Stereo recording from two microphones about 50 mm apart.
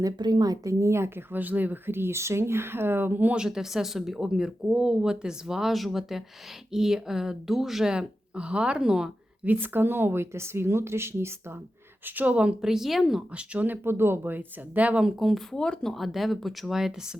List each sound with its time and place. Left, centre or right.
0.6 s speech: right
1.3 s speech: right
3.3 s speech: centre
7.9 s speech: right
9.4 s speech: right
12.0 s speech: right
12.6 s speech: centre
13.3 s speech: right
13.7 s speech: right
14.8 s speech: right
15.5 s speech: centre
15.9 s speech: centre